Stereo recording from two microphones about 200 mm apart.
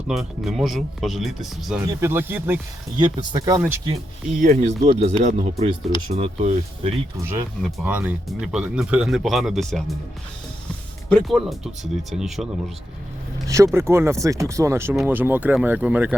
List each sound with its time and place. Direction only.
0.1 s speech: centre (ahead or behind)
1.9 s speech: 10° right (ahead or behind)
4.4 s speech: 40° right (ahead or behind)
7.2 s speech: 10° right (ahead or behind)
11.1 s speech: centre (ahead or behind)
13.7 s speech: 15° right (ahead or behind)